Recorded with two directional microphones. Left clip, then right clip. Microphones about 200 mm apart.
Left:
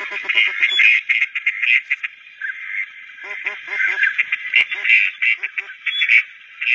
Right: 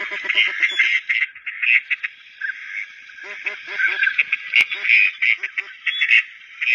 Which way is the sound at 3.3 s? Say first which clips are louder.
Left 3 dB; 25° right (ahead or behind).